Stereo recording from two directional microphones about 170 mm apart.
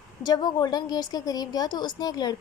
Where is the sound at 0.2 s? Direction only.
25° left (ahead or behind).